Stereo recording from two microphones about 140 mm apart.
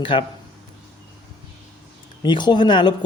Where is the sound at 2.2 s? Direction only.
35° left (ahead or behind).